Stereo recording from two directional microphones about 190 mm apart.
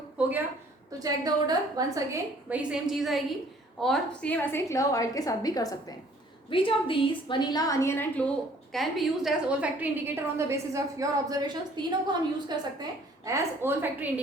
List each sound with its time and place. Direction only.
0.9 s a woman's voice: 20° right (ahead or behind)
2.1 s a woman's voice: 5° right (ahead or behind)